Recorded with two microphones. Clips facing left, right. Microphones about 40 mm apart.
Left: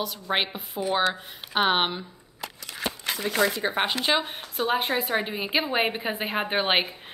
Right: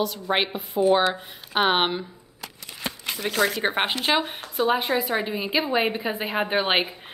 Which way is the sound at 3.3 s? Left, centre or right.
Right.